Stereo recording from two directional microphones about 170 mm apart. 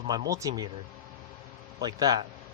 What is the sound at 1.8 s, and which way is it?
Speech, 25° right (ahead or behind).